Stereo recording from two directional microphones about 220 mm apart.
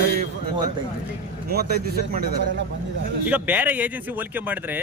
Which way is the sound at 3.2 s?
5° right (ahead or behind).